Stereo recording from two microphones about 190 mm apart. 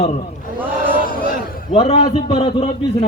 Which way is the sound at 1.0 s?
45° left (ahead or behind).